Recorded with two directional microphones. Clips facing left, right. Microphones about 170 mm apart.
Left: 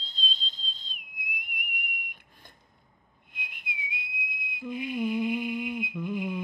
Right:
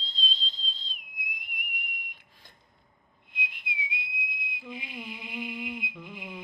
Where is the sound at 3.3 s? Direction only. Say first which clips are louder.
Right 3 dB; 50° left (ahead or behind).